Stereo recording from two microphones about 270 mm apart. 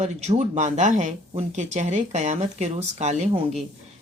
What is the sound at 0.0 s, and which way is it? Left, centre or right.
Speech, right.